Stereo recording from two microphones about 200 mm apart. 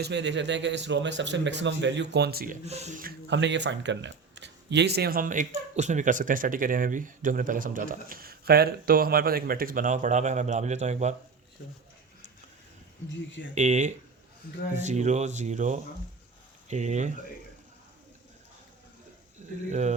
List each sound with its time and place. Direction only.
0.0 s speech: 60° right (ahead or behind)
2.6 s speech: 35° right (ahead or behind)
13.6 s speech: 35° right (ahead or behind)